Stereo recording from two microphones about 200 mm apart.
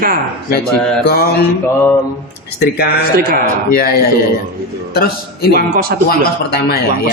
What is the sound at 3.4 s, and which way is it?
Speech, 50° left (ahead or behind).